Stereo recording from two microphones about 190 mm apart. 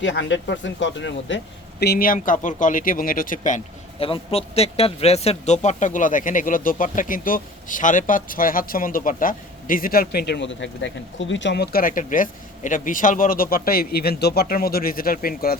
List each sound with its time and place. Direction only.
0.0 s speech: 75° left (ahead or behind)
1.8 s speech: 55° left (ahead or behind)
4.0 s speech: 30° left (ahead or behind); by 15.5 s 50° left (ahead or behind)